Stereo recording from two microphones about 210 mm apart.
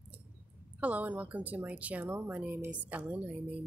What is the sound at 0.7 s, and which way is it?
Speech, 5° right (ahead or behind).